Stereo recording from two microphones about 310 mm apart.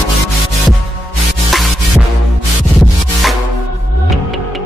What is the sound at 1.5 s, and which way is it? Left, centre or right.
Music, centre.